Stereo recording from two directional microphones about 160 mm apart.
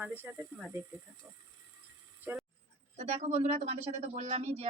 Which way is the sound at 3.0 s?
45° right (ahead or behind).